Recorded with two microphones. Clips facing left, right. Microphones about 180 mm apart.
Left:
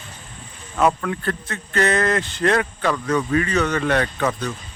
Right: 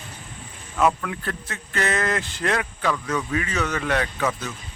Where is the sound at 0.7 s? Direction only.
40° left (ahead or behind).